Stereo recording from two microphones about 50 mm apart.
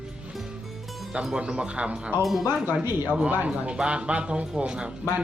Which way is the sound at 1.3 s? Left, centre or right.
Right.